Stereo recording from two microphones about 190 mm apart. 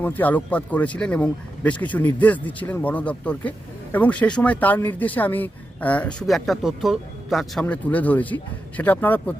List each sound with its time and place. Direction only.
0.0 s speech: 10° left (ahead or behind)